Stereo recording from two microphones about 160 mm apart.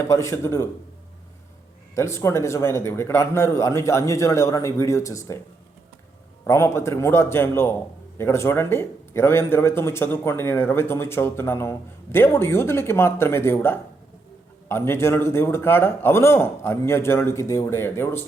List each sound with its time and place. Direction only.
0.0 s speech: 15° left (ahead or behind)
2.0 s speech: 15° left (ahead or behind)
6.4 s speech: 15° left (ahead or behind)